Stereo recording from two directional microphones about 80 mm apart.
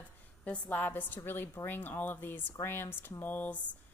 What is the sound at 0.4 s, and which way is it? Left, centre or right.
A woman's voice, centre.